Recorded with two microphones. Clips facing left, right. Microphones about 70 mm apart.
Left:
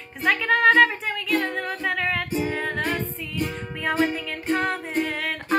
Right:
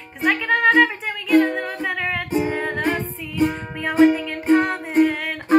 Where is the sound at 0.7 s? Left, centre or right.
Centre.